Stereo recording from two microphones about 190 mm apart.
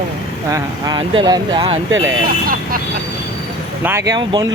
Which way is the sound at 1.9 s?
90° right.